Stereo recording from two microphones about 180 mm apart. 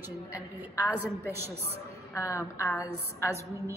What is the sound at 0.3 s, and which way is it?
Speech, 15° left (ahead or behind).